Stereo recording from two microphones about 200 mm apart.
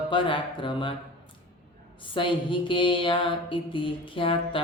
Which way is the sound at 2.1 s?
25° left (ahead or behind).